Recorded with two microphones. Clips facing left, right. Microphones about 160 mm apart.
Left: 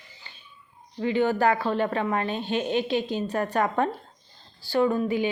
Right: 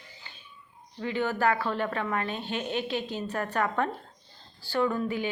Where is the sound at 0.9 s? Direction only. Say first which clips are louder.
Left 6 dB; 20° left (ahead or behind).